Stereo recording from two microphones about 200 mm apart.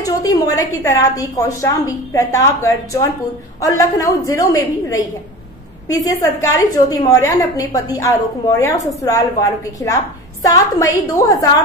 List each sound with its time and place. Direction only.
0.0 s a woman's voice: 15° left (ahead or behind)